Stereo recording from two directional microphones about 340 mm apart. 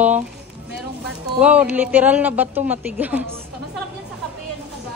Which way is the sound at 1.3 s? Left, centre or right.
Centre.